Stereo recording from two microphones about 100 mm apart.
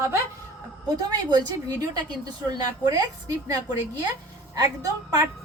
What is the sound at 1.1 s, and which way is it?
A woman's voice, 45° right (ahead or behind).